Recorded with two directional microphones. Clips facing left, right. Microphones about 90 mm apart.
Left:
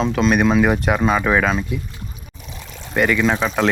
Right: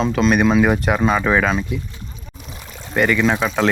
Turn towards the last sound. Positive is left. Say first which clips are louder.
# even
turn(degrees=0)  # may be behind; listen again after turning